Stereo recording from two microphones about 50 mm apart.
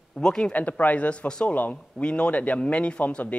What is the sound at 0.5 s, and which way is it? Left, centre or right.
Speech, left.